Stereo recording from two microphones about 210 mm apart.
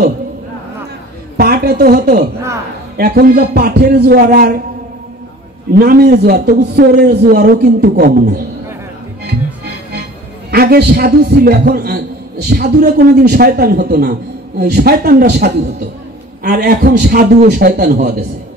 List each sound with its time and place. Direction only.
1.3 s a woman's voice: 45° right (ahead or behind)
5.7 s a man's voice: 45° right (ahead or behind)
10.5 s a man's voice: 45° right (ahead or behind)